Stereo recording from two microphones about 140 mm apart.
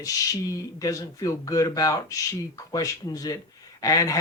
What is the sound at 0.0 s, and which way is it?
Speech, 25° left (ahead or behind).